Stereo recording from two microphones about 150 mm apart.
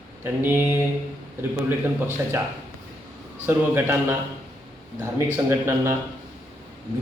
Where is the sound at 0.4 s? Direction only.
15° right (ahead or behind).